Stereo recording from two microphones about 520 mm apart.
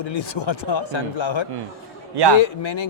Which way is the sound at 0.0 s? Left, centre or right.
Left.